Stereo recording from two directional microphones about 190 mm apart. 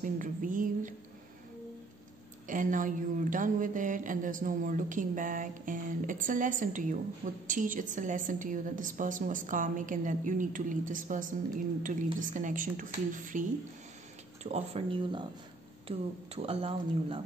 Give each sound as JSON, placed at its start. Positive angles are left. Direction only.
{"t": 0.0, "sound": "a woman's voice", "side_deg": -45}
{"t": 2.4, "sound": "a woman's voice", "side_deg": -45}
{"t": 14.4, "sound": "speech", "side_deg": -35}